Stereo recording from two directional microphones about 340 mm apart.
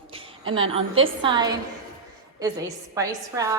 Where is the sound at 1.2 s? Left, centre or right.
Centre.